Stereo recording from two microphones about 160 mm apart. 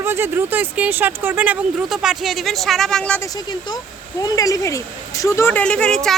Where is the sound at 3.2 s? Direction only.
25° left (ahead or behind); by 6.1 s 5° left (ahead or behind).